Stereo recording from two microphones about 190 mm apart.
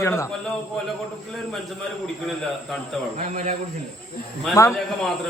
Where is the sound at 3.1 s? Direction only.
40° right (ahead or behind).